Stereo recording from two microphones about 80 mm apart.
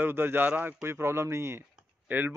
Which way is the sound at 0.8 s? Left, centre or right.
Right.